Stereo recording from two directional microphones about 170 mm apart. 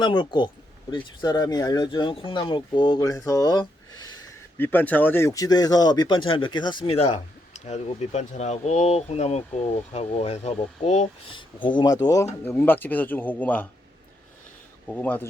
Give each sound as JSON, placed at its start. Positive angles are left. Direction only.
{"t": 0.0, "sound": "speech", "side_deg": 25}
{"t": 4.5, "sound": "speech", "side_deg": 10}
{"t": 11.8, "sound": "speech", "side_deg": 20}
{"t": 14.8, "sound": "speech", "side_deg": 10}